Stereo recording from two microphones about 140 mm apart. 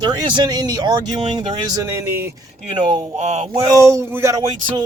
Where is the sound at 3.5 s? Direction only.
25° right (ahead or behind).